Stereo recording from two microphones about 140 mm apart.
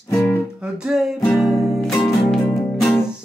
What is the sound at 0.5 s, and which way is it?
Music, 5° right (ahead or behind).